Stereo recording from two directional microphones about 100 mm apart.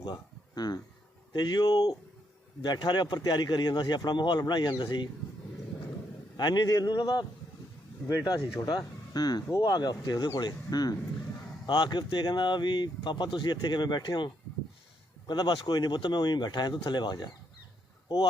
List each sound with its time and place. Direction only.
0.0 s a sound: 45° left (ahead or behind)
1.3 s speech: 45° left (ahead or behind)
6.3 s speech: 45° left (ahead or behind)
15.3 s speech: 50° left (ahead or behind)